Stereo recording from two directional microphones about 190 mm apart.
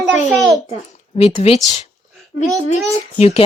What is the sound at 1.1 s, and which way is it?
Speech, 30° left (ahead or behind).